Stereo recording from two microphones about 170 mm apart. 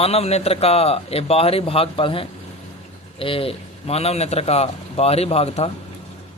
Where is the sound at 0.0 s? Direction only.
35° left (ahead or behind).